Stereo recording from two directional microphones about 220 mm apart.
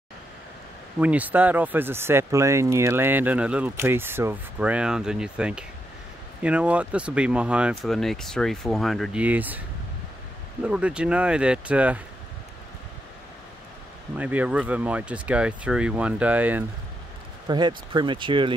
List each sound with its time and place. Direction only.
0.9 s speech: 5° right (ahead or behind)
10.6 s speech: 5° right (ahead or behind)
14.1 s speech: 5° right (ahead or behind)
17.5 s speech: 20° right (ahead or behind)